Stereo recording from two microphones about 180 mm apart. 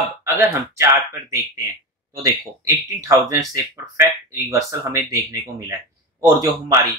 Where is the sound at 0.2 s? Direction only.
15° right (ahead or behind).